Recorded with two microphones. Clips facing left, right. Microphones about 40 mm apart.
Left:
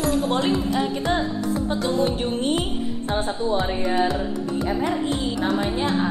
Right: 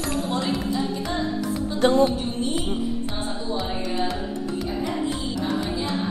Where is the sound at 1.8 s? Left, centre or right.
Right.